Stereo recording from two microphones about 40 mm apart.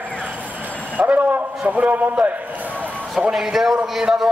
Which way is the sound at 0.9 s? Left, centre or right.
Right.